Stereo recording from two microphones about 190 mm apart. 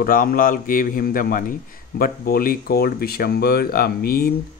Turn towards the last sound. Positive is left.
turn(degrees=50)  # may be behind; listen again after turning